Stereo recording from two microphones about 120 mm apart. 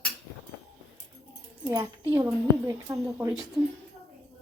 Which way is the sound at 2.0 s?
20° right (ahead or behind).